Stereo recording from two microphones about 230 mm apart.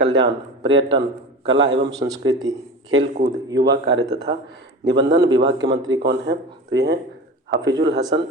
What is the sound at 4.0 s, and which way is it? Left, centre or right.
Speech, centre.